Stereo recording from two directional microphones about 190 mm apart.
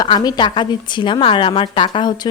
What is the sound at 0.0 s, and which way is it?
A woman's voice, 20° left (ahead or behind).